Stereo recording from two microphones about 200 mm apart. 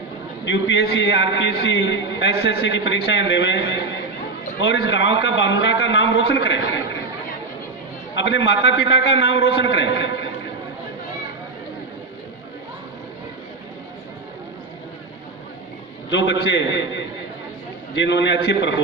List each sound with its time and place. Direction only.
0.4 s a man's voice: 65° left (ahead or behind)
8.1 s a man's voice: 65° left (ahead or behind)
16.0 s a man's voice: 65° left (ahead or behind)